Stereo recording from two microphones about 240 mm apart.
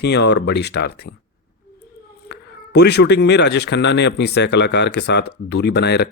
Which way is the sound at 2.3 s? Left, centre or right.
Left.